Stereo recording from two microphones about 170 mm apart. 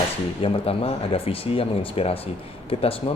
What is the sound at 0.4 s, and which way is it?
Speech, 35° left (ahead or behind).